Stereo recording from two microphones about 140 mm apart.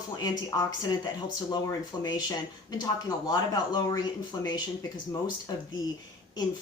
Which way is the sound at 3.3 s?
30° left (ahead or behind).